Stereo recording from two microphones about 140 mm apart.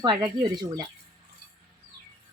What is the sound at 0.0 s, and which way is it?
Speech, 30° right (ahead or behind).